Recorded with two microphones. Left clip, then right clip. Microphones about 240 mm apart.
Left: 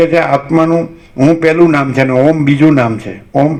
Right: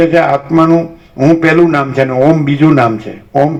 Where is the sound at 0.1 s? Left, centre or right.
Left.